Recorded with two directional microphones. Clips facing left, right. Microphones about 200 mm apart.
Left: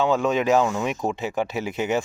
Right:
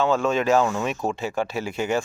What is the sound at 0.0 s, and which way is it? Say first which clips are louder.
Speech: even; 15° left (ahead or behind).